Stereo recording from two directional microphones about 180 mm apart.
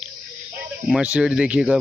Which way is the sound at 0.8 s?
5° right (ahead or behind).